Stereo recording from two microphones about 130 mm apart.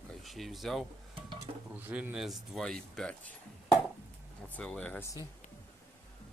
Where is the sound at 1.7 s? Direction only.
15° right (ahead or behind); by 3.3 s 5° left (ahead or behind).